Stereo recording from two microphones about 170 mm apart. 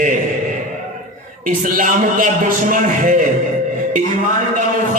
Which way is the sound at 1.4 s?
50° right (ahead or behind).